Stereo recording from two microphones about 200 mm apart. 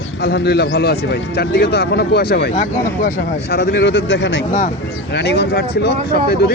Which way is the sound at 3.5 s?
55° left (ahead or behind).